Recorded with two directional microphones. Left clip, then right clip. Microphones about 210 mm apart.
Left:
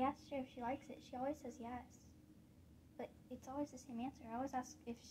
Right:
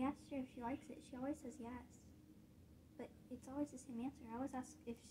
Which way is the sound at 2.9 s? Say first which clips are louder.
Left 3 dB; 35° left (ahead or behind).